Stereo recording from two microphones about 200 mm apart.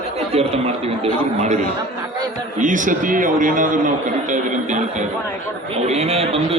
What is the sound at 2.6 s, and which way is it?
A man's voice, 40° right (ahead or behind).